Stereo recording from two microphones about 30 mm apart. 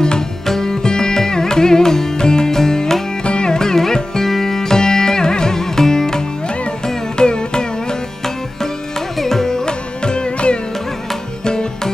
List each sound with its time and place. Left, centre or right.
0.5 s music: centre
3.3 s music: left
9.2 s carnatic music: centre
9.7 s music: left